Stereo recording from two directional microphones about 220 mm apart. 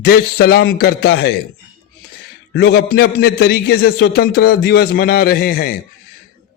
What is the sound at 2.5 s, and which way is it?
A man's voice, 50° left (ahead or behind).